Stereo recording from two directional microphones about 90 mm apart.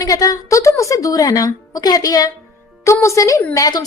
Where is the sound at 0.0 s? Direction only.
40° left (ahead or behind).